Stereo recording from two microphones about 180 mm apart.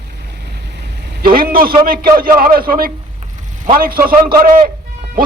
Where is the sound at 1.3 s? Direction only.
55° right (ahead or behind).